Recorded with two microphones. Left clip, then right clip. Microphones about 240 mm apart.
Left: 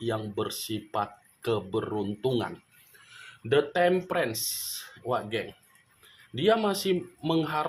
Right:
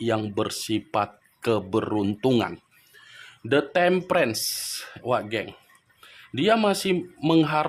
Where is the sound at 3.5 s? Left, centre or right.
Right.